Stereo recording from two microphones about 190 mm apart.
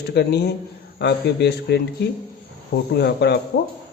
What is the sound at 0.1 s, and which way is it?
Speech, 60° left (ahead or behind).